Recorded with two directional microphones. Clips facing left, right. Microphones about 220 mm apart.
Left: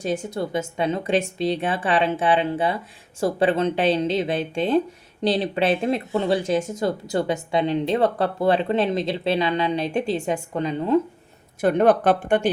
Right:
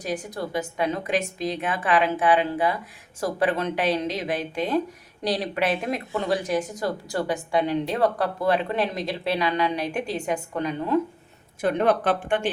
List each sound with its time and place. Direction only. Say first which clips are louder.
0.0 s speech: left 4 dB; 25° left (ahead or behind)
11.6 s speech: left 4 dB; 45° left (ahead or behind)